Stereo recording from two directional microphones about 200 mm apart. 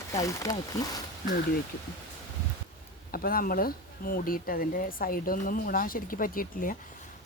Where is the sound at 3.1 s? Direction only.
45° left (ahead or behind).